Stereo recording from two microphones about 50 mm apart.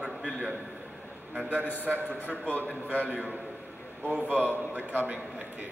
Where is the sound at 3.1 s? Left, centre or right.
Right.